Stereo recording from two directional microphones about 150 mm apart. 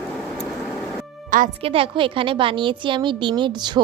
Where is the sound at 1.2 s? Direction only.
65° right (ahead or behind).